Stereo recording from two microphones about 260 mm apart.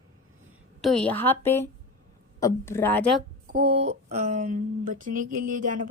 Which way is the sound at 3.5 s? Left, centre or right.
Right.